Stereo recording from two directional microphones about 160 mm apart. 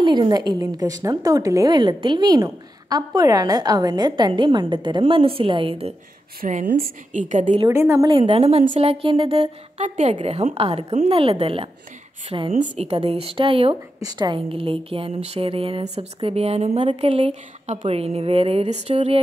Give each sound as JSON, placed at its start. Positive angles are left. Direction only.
{"t": 0.0, "sound": "a woman's voice", "side_deg": -30}
{"t": 6.4, "sound": "a woman's voice", "side_deg": -50}
{"t": 7.6, "sound": "a woman's voice", "side_deg": -20}
{"t": 8.1, "sound": "speech", "side_deg": -40}